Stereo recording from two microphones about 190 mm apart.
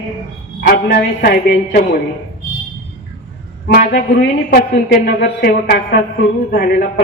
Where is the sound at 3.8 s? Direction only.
55° left (ahead or behind).